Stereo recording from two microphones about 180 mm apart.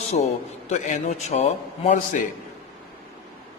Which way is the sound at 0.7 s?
40° left (ahead or behind).